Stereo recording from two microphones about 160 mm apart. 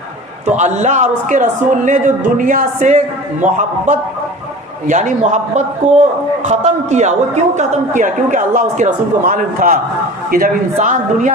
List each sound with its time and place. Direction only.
0.4 s a man's voice: 45° right (ahead or behind)